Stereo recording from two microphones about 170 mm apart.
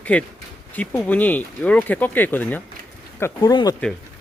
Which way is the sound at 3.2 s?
20° left (ahead or behind).